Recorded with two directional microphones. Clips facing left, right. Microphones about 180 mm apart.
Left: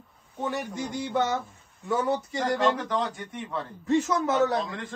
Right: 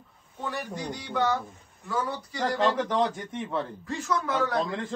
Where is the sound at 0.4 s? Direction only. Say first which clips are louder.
Left 3 dB; 20° left (ahead or behind).